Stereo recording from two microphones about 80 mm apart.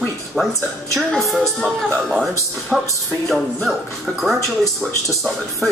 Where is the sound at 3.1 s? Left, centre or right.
Centre.